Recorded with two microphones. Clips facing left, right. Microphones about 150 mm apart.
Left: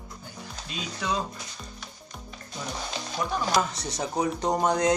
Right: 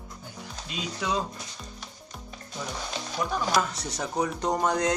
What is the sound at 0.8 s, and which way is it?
Speech, 10° right (ahead or behind).